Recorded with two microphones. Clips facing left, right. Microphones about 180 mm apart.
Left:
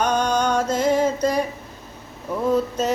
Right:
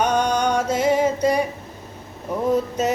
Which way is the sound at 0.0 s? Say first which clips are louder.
Right 1 dB; 15° right (ahead or behind).